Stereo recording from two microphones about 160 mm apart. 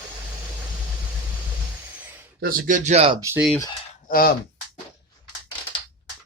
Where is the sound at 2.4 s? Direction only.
65° right (ahead or behind); by 3.1 s 45° right (ahead or behind).